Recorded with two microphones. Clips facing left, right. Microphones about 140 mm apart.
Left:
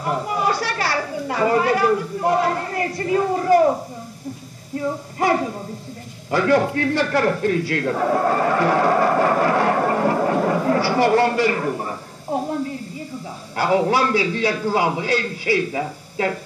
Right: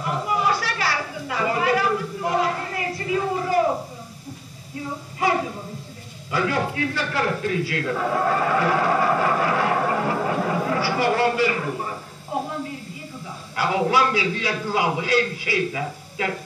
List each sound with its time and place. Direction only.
0.0 s speech: 40° left (ahead or behind)
4.7 s speech: 45° left (ahead or behind)
6.3 s a man's voice: 45° left (ahead or behind)
13.6 s a man's voice: 40° left (ahead or behind)